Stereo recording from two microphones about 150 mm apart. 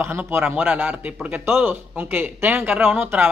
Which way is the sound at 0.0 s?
15° right (ahead or behind).